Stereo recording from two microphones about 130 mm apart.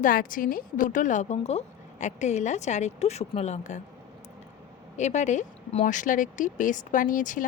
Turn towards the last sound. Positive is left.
turn(degrees=85)